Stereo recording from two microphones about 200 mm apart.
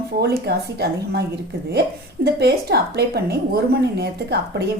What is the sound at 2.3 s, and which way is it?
A woman's voice, 55° right (ahead or behind).